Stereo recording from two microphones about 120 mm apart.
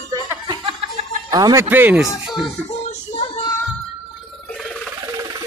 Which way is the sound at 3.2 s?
50° left (ahead or behind).